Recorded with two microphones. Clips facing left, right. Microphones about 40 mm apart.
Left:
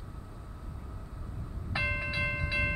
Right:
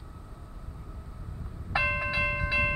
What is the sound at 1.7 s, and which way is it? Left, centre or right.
Music, right.